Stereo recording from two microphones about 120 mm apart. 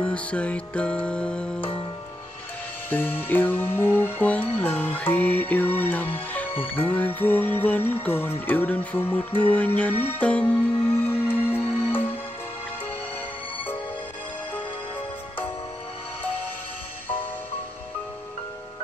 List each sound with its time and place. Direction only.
0.0 s music: 10° left (ahead or behind)
2.9 s music: 15° left (ahead or behind)